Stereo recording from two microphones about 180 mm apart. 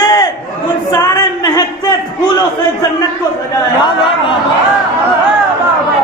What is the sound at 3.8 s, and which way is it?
Speech, 25° left (ahead or behind).